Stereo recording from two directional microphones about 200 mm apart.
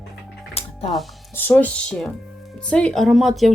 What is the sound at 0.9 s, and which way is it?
Speech, 10° left (ahead or behind).